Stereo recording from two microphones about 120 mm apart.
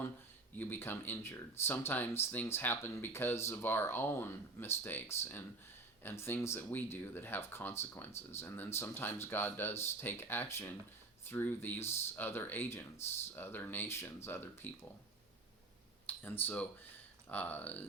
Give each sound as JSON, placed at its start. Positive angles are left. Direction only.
{"t": 0.6, "sound": "speech", "side_deg": 15}
{"t": 16.0, "sound": "speech", "side_deg": 15}